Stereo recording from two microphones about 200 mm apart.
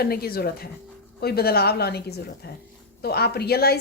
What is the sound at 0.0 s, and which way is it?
A woman's voice, 50° left (ahead or behind).